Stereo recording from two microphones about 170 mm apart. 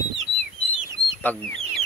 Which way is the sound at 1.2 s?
10° left (ahead or behind).